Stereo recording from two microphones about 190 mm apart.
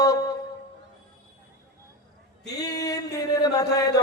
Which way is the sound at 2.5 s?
20° left (ahead or behind).